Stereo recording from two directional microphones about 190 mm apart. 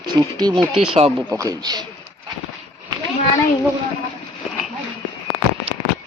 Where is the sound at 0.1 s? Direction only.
20° right (ahead or behind).